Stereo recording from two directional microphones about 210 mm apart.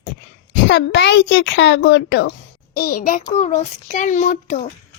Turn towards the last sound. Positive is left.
turn(degrees=40)  # may be behind; listen again after turning